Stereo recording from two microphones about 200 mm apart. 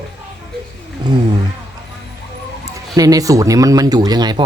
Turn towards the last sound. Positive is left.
turn(degrees=-20)  # may be behind; listen again after turning